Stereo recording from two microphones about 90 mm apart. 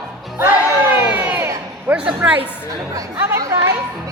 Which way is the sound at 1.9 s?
10° right (ahead or behind).